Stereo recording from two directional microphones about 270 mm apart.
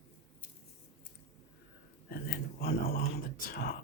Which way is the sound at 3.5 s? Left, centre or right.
Left.